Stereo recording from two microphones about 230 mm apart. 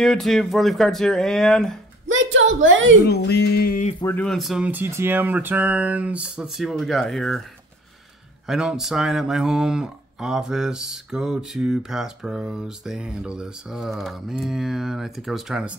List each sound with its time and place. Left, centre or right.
0.0 s speech: centre
2.0 s speech: right
3.1 s a sound: left
4.0 s speech: centre
8.5 s speech: centre